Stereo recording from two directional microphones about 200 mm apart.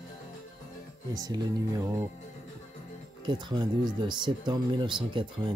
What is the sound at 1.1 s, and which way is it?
Speech, 20° right (ahead or behind).